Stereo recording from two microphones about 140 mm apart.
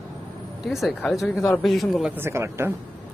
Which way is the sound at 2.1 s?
15° right (ahead or behind).